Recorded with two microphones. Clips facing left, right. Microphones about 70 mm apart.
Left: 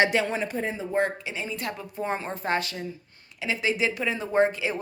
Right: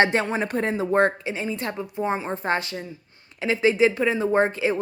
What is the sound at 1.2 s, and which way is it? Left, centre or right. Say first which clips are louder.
A woman's voice: right 4 dB; right.